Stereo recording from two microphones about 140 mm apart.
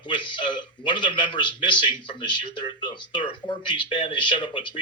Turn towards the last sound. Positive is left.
turn(degrees=35)  # may be behind; listen again after turning